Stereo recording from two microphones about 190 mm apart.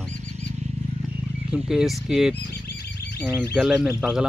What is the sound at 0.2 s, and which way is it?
Wild animals, 40° right (ahead or behind).